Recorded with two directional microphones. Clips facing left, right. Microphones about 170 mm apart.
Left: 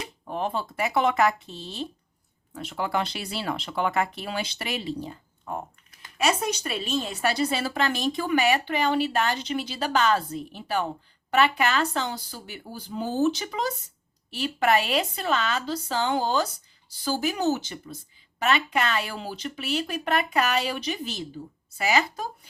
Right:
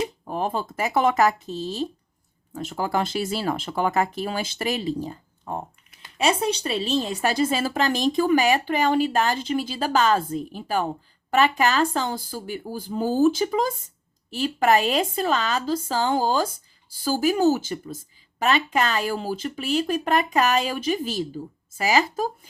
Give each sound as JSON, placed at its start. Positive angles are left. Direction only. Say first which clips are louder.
{"t": 0.3, "sound": "a woman's voice", "louder": "left 2 dB", "side_deg": -40}